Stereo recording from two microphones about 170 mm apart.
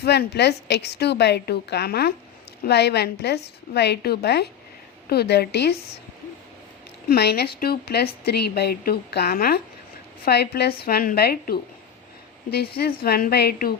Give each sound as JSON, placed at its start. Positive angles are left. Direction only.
{"t": 0.0, "sound": "speech", "side_deg": 75}
{"t": 2.6, "sound": "speech", "side_deg": 80}
{"t": 7.1, "sound": "a woman's voice", "side_deg": 70}
{"t": 13.0, "sound": "a woman's voice", "side_deg": 60}